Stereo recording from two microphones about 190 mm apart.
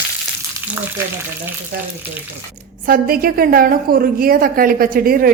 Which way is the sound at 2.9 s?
50° right (ahead or behind).